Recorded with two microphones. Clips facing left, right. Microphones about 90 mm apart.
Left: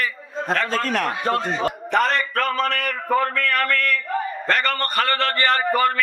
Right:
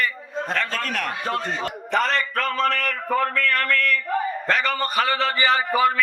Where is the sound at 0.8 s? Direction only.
30° left (ahead or behind).